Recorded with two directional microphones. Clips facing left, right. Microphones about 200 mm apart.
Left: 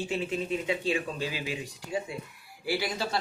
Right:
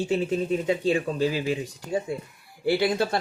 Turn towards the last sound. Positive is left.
turn(degrees=-55)  # may be behind; listen again after turning